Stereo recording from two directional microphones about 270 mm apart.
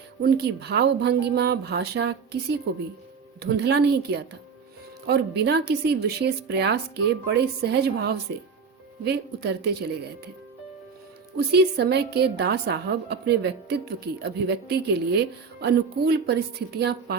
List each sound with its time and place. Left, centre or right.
0.2 s a woman's voice: right
3.4 s a woman's voice: right
11.3 s a woman's voice: right